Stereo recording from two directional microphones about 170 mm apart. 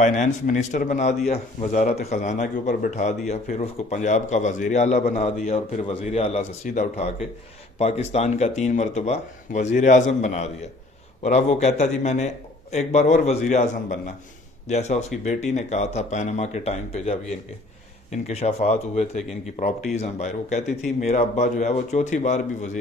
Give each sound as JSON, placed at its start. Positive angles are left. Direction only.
{"t": 0.0, "sound": "a man's voice", "side_deg": 45}
{"t": 6.6, "sound": "a man's voice", "side_deg": 45}